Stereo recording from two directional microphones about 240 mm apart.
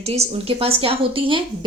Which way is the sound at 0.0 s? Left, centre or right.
Right.